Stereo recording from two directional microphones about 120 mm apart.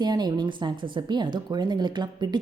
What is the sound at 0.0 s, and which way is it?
Speech, 35° right (ahead or behind).